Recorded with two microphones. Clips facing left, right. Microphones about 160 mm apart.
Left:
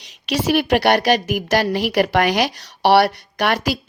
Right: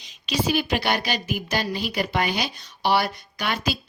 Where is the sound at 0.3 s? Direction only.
65° left (ahead or behind).